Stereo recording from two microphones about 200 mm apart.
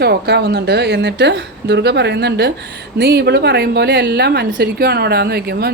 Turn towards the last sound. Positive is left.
turn(degrees=-50)  # may be behind; listen again after turning